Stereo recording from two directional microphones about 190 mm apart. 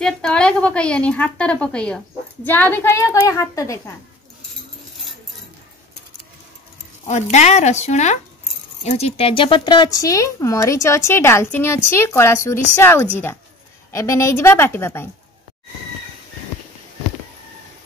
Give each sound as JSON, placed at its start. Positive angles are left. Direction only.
{"t": 0.0, "sound": "a woman's voice", "side_deg": 5}
{"t": 7.1, "sound": "speech", "side_deg": 40}